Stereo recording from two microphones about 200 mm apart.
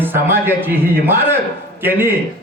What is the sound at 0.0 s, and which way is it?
A man's voice, 10° right (ahead or behind).